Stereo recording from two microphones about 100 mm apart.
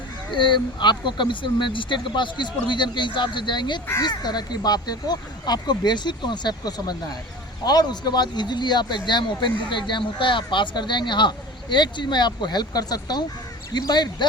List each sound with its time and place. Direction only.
0.3 s speech: 50° left (ahead or behind)